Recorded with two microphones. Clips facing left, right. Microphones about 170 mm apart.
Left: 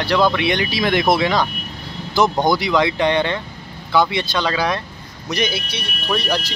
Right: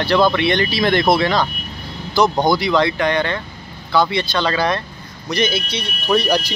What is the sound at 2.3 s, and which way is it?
Speech, 5° right (ahead or behind).